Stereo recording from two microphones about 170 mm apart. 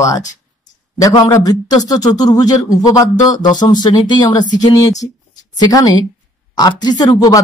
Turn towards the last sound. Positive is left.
turn(degrees=20)  # may be behind; listen again after turning